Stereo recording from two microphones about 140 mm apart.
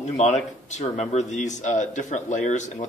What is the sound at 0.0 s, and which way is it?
A man's voice, 55° left (ahead or behind).